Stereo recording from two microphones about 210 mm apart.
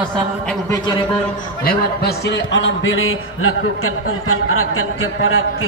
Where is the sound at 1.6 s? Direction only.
50° left (ahead or behind).